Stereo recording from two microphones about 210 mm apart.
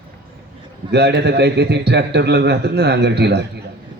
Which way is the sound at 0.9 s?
50° right (ahead or behind).